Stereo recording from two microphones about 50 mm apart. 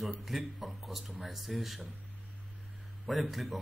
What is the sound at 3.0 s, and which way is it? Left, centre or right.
Speech, centre.